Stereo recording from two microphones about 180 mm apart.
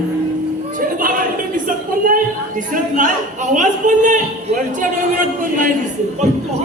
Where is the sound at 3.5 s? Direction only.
45° right (ahead or behind).